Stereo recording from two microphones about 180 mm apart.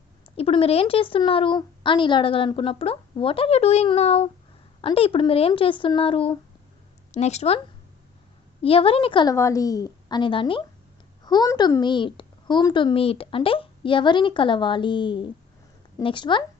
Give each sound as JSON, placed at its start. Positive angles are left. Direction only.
{"t": 0.3, "sound": "speech", "side_deg": 30}
{"t": 8.6, "sound": "speech", "side_deg": 30}
{"t": 9.3, "sound": "a woman's voice", "side_deg": 15}